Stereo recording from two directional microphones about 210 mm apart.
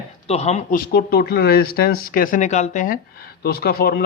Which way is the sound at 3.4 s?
50° left (ahead or behind).